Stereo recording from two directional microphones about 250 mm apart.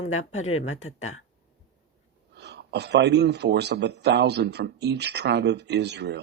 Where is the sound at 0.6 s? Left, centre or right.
Left.